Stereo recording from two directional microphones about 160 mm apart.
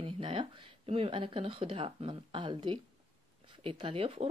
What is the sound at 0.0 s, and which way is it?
Speech, 35° right (ahead or behind).